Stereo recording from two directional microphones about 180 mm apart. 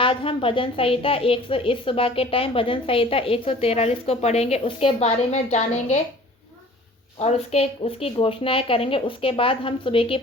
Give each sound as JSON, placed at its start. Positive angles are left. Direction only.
{"t": 0.0, "sound": "a woman's voice", "side_deg": 30}
{"t": 7.2, "sound": "a woman's voice", "side_deg": 35}